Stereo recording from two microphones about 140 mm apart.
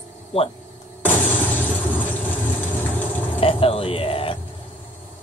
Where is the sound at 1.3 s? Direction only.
10° left (ahead or behind).